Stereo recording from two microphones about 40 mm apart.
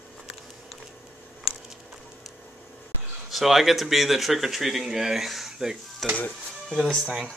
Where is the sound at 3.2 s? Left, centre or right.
Centre.